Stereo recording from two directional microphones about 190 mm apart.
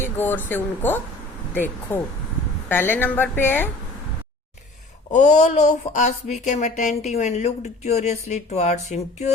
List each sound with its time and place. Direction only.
0.0 s speech: 10° left (ahead or behind)
5.1 s speech: 40° left (ahead or behind)